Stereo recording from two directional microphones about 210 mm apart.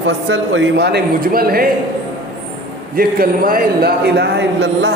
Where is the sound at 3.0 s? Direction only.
45° right (ahead or behind).